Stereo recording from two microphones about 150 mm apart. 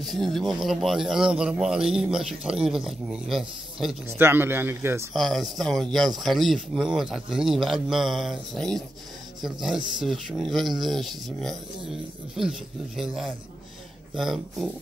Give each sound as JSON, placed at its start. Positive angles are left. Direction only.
{"t": 0.0, "sound": "speech", "side_deg": 0}
{"t": 4.2, "sound": "a man's voice", "side_deg": -15}
{"t": 5.1, "sound": "speech", "side_deg": 0}